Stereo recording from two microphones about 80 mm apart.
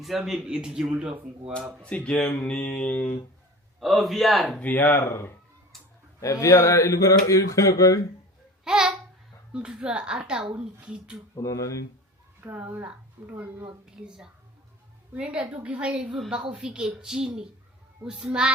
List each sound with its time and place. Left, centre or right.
0.0 s speech: centre
1.8 s speech: centre
3.8 s a man's voice: centre
4.5 s speech: left
6.1 s speech: left
8.6 s babbling: centre
9.5 s speech: centre
11.3 s speech: left
12.4 s speech: right